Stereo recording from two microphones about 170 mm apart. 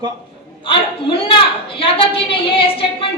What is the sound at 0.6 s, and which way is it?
A woman's voice, 30° left (ahead or behind).